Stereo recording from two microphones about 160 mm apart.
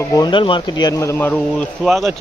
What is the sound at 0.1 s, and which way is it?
Speech, 25° left (ahead or behind).